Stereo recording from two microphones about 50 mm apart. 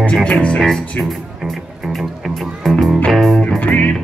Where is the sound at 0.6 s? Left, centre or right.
Centre.